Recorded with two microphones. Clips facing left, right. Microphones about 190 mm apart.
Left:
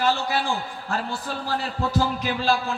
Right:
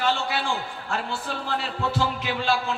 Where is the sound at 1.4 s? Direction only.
40° left (ahead or behind).